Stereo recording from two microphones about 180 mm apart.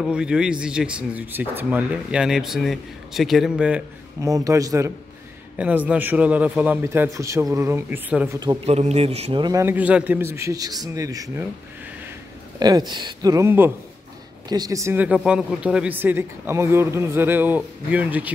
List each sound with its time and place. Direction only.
0.0 s speech: 5° right (ahead or behind)
4.2 s speech: 20° right (ahead or behind)
8.6 s a man's voice: 35° right (ahead or behind); by 11.4 s 20° right (ahead or behind)
12.5 s a man's voice: 20° right (ahead or behind)